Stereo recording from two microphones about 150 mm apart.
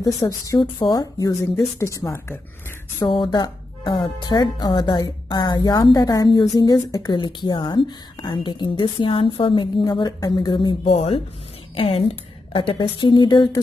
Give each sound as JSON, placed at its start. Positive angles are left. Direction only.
{"t": 0.0, "sound": "speech", "side_deg": 20}
{"t": 3.1, "sound": "a woman's voice", "side_deg": 30}